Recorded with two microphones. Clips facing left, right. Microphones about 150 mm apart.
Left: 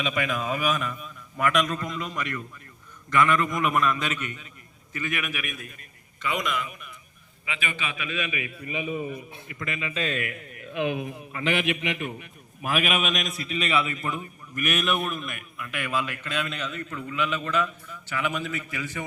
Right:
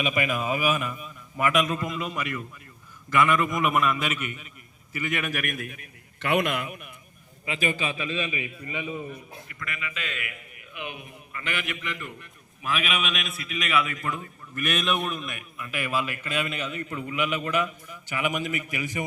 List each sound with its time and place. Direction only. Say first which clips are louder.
0.0 s a man's voice: right 1 dB; 5° right (ahead or behind)
5.2 s a man's voice: right 4 dB; 45° right (ahead or behind)
7.4 s a man's voice: right 5 dB; 40° right (ahead or behind)
9.5 s a man's voice: left 5 dB; 25° left (ahead or behind); by 10.3 s 40° left (ahead or behind)
11.4 s a man's voice: left 7 dB; 90° left; by 12.3 s 70° left (ahead or behind)
12.6 s a man's voice: left 3 dB; 50° left (ahead or behind); by 19.0 s 15° right (ahead or behind)